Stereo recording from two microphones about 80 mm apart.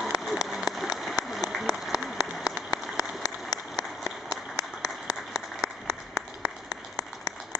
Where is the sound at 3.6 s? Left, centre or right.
Centre.